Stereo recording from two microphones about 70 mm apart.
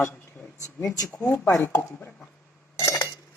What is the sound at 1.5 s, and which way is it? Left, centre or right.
Speech, left.